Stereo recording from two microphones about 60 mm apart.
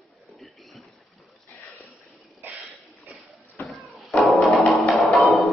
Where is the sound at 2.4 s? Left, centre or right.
Right.